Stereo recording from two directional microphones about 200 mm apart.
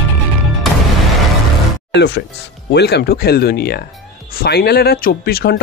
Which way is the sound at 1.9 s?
55° left (ahead or behind).